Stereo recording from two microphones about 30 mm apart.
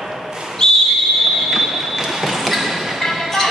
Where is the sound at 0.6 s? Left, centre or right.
Left.